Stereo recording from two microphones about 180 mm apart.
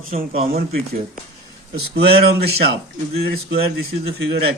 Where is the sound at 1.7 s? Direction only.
65° right (ahead or behind).